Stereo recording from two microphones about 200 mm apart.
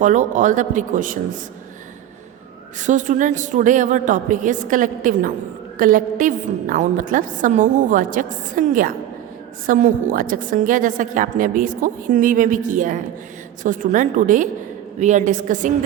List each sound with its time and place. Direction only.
0.0 s a woman's voice: 40° right (ahead or behind)
2.7 s a woman's voice: 40° right (ahead or behind)